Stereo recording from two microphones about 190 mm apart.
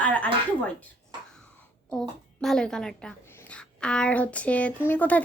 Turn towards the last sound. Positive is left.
turn(degrees=10)  # may be behind; listen again after turning